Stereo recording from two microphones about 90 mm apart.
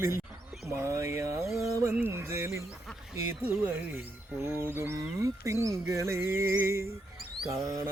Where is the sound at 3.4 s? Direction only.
20° right (ahead or behind).